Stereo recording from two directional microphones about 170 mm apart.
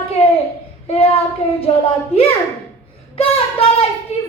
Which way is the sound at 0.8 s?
35° left (ahead or behind).